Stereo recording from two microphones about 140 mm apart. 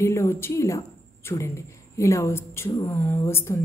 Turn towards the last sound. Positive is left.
turn(degrees=20)  # may be behind; listen again after turning